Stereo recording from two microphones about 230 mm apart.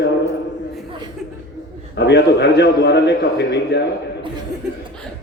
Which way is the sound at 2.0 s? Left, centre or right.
Left.